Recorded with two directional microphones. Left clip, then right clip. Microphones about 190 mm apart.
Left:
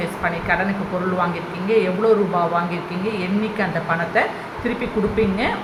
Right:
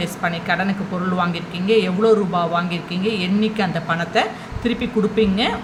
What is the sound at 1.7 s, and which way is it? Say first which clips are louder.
Speech: right 1 dB; 30° right (ahead or behind).